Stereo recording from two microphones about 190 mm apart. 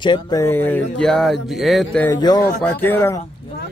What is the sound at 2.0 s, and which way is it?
Speech, 20° left (ahead or behind).